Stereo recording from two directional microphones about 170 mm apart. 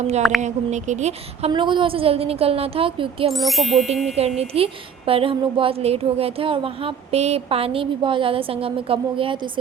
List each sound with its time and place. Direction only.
0.2 s speech: centre (ahead or behind)
0.4 s a woman's voice: 45° right (ahead or behind)
3.3 s speech: centre (ahead or behind)
4.4 s a woman's voice: 35° right (ahead or behind)